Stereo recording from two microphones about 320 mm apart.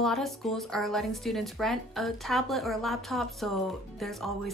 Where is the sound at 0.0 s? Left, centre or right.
Centre.